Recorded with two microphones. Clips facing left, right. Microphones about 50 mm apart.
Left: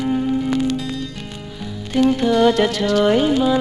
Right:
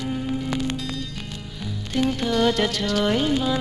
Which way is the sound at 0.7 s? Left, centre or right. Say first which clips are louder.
Left 5 dB; centre.